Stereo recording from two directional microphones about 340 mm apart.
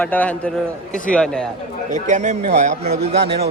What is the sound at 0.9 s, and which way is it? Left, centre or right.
Speech, left.